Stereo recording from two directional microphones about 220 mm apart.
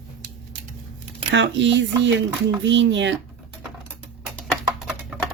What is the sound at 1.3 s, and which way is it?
Speech, 55° right (ahead or behind).